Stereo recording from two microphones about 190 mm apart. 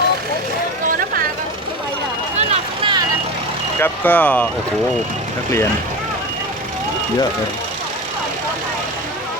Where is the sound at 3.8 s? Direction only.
10° left (ahead or behind).